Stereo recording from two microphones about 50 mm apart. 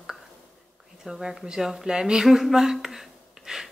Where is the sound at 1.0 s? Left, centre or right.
Centre.